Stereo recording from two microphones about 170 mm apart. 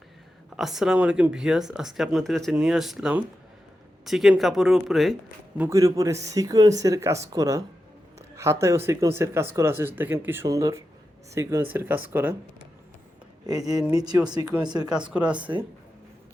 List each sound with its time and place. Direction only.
0.5 s speech: centre (ahead or behind)
5.5 s speech: 15° right (ahead or behind)
8.6 s speech: 15° right (ahead or behind)
13.9 s speech: 25° right (ahead or behind)
14.8 s speech: 5° right (ahead or behind)